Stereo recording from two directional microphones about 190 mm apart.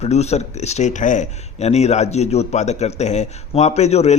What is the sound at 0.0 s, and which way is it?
Speech, 35° left (ahead or behind).